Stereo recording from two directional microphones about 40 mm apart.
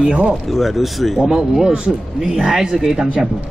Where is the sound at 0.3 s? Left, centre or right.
Centre.